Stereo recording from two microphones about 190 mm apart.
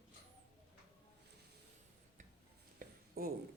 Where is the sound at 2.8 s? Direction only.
50° right (ahead or behind).